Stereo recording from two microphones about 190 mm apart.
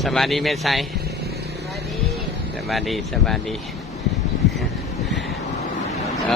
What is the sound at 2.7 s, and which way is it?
Speech, centre (ahead or behind).